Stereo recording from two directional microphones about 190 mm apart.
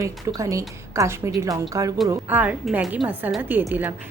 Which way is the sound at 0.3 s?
15° right (ahead or behind).